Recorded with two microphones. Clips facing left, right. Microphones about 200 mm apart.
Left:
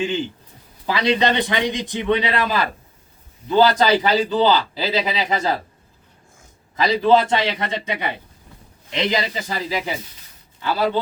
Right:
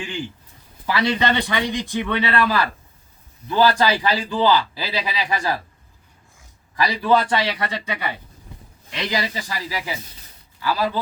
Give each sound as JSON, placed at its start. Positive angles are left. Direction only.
{"t": 0.9, "sound": "a man's voice", "side_deg": 20}
{"t": 6.7, "sound": "a man's voice", "side_deg": 20}